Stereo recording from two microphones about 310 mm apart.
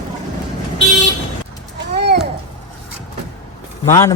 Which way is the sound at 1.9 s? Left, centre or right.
Right.